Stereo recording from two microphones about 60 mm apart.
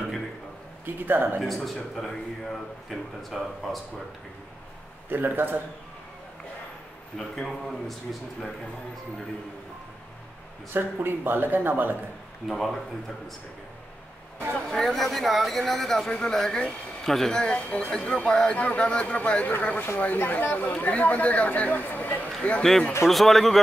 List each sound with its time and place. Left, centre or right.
0.8 s speech: right
1.4 s speech: centre
5.1 s speech: right
7.2 s speech: centre
10.7 s speech: right
12.4 s speech: centre
14.7 s speech: centre
17.6 s speech: left
23.0 s speech: centre